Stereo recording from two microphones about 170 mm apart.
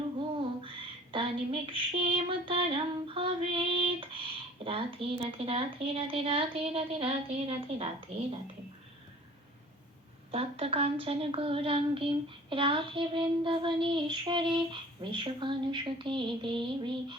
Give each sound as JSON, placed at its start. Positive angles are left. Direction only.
{"t": 0.2, "sound": "child singing", "side_deg": -30}
{"t": 10.3, "sound": "a woman's voice", "side_deg": -35}